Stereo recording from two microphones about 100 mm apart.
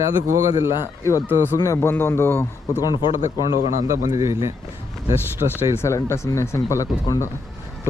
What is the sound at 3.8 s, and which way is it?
Speech, 30° right (ahead or behind).